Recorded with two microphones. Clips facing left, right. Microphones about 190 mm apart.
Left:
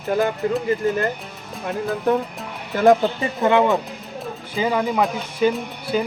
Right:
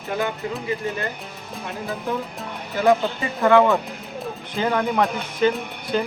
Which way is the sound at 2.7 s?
50° left (ahead or behind).